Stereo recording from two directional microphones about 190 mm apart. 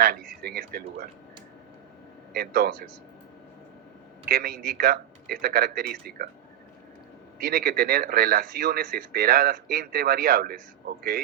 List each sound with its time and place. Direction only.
0.0 s speech: 55° right (ahead or behind)
2.3 s speech: 55° right (ahead or behind)
4.3 s speech: 55° right (ahead or behind)
7.3 s speech: 55° right (ahead or behind)